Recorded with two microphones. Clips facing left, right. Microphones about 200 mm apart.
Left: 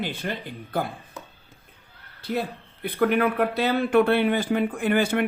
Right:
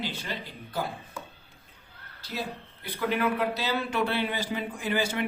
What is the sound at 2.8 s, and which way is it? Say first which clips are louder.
A man's voice: left 6 dB; 55° left (ahead or behind).